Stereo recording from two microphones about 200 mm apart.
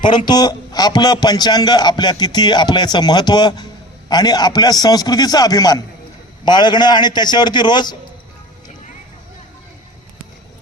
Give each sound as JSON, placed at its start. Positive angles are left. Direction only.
{"t": 0.3, "sound": "a man's voice", "side_deg": 20}